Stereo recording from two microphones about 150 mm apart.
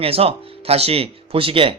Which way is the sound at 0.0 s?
40° right (ahead or behind).